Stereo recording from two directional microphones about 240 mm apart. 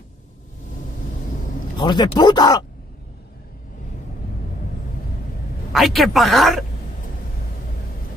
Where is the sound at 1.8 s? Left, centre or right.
Centre.